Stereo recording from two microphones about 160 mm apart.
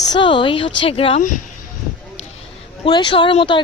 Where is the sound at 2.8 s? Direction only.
30° left (ahead or behind).